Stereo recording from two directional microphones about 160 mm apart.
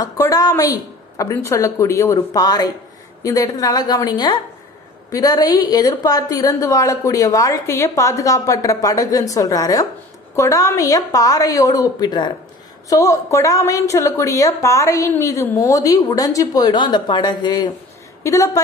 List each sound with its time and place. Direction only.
0.0 s a woman's voice: 20° left (ahead or behind)